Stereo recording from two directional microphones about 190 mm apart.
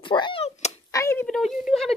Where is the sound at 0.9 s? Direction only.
15° left (ahead or behind).